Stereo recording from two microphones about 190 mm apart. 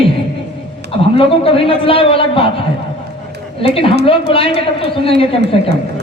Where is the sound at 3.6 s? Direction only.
30° left (ahead or behind).